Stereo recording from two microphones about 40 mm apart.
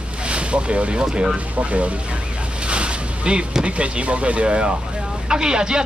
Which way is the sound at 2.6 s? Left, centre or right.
Right.